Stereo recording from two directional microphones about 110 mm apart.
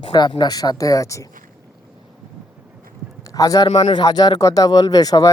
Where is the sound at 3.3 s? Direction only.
35° left (ahead or behind).